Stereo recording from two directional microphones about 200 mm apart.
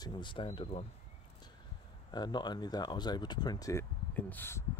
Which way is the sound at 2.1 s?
20° left (ahead or behind).